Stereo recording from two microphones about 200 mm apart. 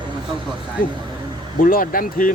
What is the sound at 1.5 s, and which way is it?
Speech, 45° left (ahead or behind).